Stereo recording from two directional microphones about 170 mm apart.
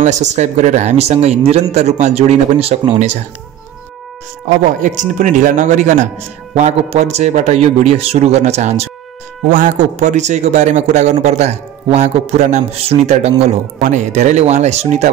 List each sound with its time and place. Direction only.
0.0 s speech: 40° right (ahead or behind)
4.8 s a man's voice: 45° right (ahead or behind)